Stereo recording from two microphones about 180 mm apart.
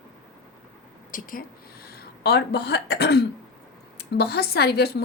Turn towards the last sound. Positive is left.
turn(degrees=60)  # may be behind; listen again after turning